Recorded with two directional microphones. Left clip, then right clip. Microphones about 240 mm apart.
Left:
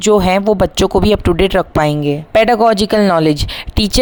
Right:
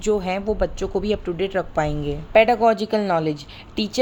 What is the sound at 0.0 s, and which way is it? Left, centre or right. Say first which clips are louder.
A woman's voice: left 11 dB; left.